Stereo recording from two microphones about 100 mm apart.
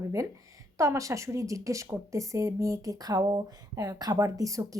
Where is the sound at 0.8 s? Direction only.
30° right (ahead or behind).